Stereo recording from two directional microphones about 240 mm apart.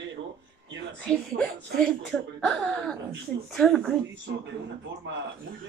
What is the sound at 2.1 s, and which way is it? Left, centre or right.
A child's voice, centre.